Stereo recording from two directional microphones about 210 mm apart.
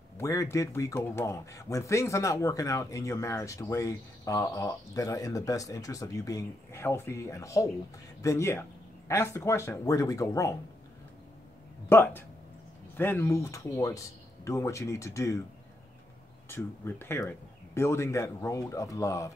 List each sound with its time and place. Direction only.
0.2 s speech: 15° left (ahead or behind)
11.9 s speech: 10° left (ahead or behind)
16.4 s speech: 10° left (ahead or behind)